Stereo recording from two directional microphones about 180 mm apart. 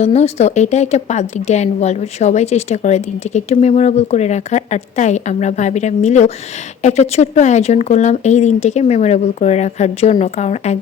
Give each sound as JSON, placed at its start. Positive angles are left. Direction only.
{"t": 0.0, "sound": "a woman's voice", "side_deg": 35}